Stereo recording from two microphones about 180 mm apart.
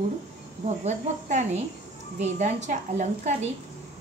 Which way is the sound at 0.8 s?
40° right (ahead or behind).